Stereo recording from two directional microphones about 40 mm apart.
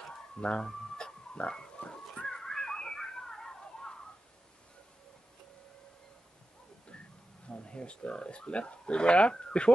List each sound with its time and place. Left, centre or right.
0.4 s speech: left
0.7 s chicken: centre
1.5 s pig: left
2.2 s a sound: centre
7.4 s speech: left